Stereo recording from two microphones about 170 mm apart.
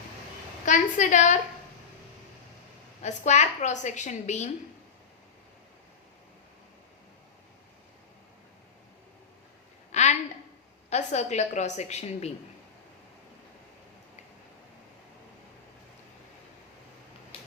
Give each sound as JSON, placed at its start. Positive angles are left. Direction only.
{"t": 0.6, "sound": "a woman's voice", "side_deg": 45}
{"t": 3.0, "sound": "a woman's voice", "side_deg": 45}
{"t": 9.9, "sound": "a sound", "side_deg": 40}
{"t": 10.8, "sound": "a woman's voice", "side_deg": 40}